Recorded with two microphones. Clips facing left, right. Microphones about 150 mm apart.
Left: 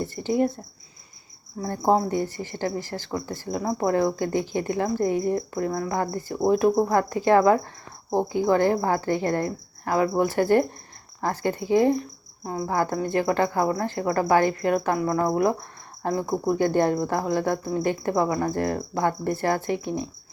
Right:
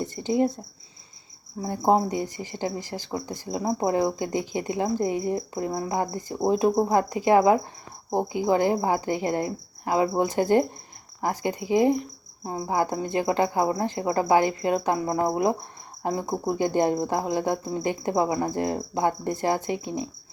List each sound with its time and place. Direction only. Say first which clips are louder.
0.0 s speech: even; 20° right (ahead or behind)
1.6 s speech: even; 15° right (ahead or behind)